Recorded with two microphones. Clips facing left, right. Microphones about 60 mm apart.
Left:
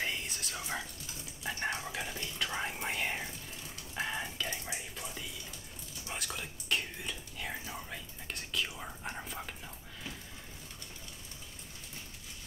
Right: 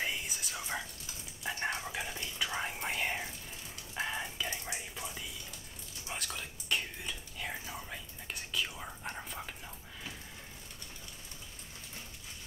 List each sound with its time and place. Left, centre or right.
0.0 s whispering: centre
1.4 s a sound: centre
2.3 s whispering: centre
3.9 s frying: centre
4.5 s whispering: centre
6.0 s whispering: centre